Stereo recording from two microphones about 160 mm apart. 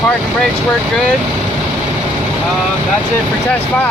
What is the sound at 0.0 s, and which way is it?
Speech, 5° left (ahead or behind).